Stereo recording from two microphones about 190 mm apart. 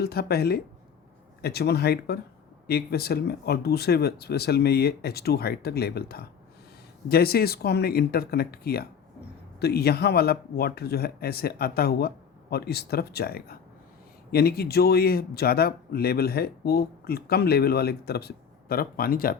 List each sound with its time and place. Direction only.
0.0 s speech: 55° left (ahead or behind)